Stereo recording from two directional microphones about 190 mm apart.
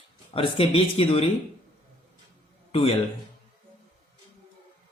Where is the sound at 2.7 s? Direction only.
30° left (ahead or behind).